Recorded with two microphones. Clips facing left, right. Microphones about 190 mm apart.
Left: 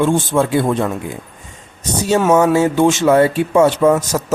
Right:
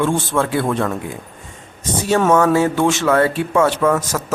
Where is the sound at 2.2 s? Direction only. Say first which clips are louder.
Left 2 dB; 10° left (ahead or behind).